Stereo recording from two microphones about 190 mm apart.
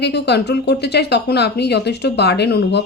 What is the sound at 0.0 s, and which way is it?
A woman's voice, 60° left (ahead or behind).